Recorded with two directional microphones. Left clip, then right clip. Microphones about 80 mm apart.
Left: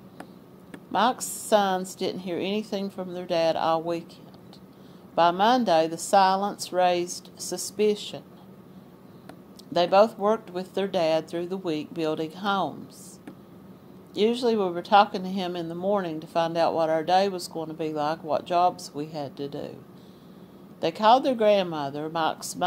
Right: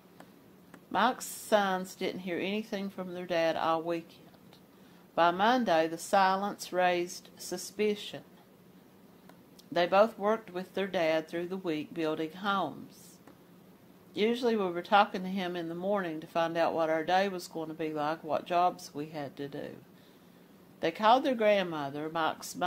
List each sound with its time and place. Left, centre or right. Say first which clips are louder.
0.9 s speech: left 5 dB; left
5.1 s speech: left 5 dB; left
9.7 s speech: left 6 dB; left
14.1 s speech: left 6 dB; left
20.8 s speech: left 6 dB; left